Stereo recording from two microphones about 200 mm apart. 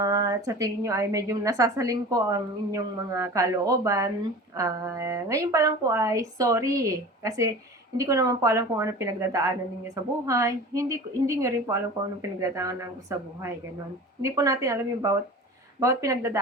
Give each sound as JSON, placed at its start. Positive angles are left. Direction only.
{"t": 0.0, "sound": "a woman's voice", "side_deg": -15}